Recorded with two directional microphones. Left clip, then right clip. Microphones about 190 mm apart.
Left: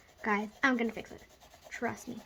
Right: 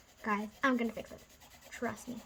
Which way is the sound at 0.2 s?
30° left (ahead or behind).